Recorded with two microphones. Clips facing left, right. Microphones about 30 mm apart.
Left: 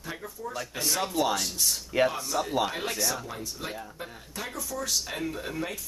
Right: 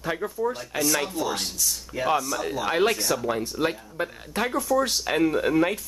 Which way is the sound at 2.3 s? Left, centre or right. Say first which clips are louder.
Even; right.